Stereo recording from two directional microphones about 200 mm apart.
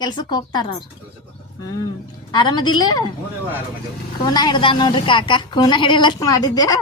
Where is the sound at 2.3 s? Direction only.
20° left (ahead or behind).